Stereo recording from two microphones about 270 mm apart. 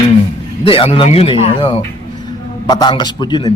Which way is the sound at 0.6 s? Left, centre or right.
Centre.